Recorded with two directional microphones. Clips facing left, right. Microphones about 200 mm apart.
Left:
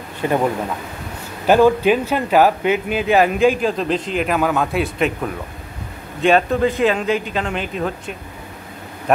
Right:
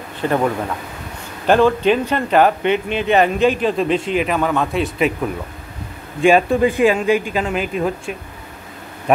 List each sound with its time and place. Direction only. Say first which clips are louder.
0.2 s a man's voice: even; 10° left (ahead or behind)
1.4 s speech: left 1 dB; 10° left (ahead or behind)